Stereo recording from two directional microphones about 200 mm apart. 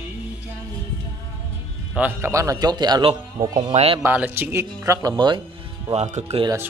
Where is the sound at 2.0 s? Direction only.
10° right (ahead or behind).